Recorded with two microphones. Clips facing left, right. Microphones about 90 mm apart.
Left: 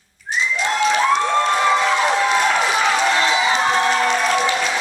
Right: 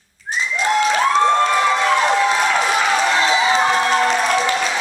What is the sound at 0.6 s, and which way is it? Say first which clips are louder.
Applause: right 3 dB; centre (ahead or behind).